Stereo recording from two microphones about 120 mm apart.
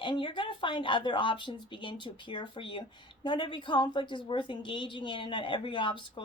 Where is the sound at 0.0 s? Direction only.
45° left (ahead or behind).